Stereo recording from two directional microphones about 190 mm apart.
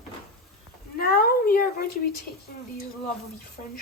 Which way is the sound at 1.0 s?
50° left (ahead or behind).